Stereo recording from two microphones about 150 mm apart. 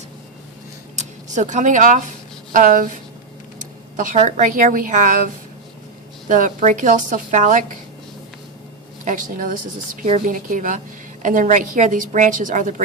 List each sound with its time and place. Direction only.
0.9 s a woman's voice: 55° right (ahead or behind)
9.0 s a woman's voice: 60° right (ahead or behind)